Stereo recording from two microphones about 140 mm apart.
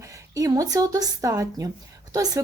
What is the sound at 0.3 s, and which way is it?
A woman's voice, 25° right (ahead or behind).